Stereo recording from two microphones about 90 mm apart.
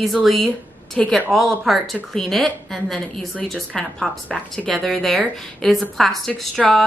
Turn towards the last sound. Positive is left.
turn(degrees=0)  # may be behind; listen again after turning